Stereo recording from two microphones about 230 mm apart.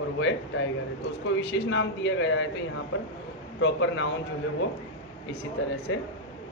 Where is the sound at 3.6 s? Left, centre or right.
Left.